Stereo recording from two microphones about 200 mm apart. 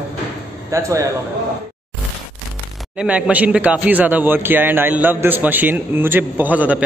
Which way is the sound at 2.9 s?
5° right (ahead or behind).